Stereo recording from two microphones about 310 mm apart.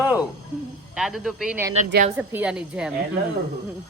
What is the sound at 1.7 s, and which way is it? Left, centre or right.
Speech, right.